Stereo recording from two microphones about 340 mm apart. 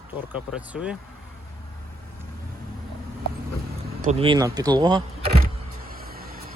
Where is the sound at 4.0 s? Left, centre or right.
Centre.